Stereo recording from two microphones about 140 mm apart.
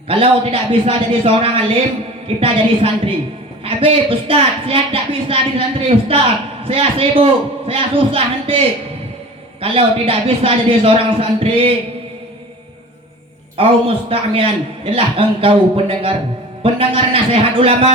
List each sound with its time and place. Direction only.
0.1 s a woman's voice: 40° right (ahead or behind)
13.6 s a woman's voice: 40° right (ahead or behind)